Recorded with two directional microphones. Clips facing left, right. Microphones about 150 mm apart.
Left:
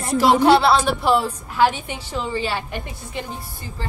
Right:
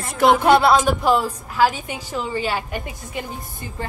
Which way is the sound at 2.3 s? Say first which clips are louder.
Right 1 dB; 45° right (ahead or behind).